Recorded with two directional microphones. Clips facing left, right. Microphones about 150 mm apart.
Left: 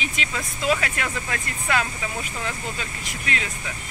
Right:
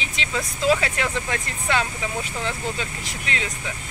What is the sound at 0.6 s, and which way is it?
Speech, 25° right (ahead or behind).